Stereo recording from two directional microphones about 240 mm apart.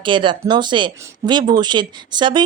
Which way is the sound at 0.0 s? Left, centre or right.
Centre.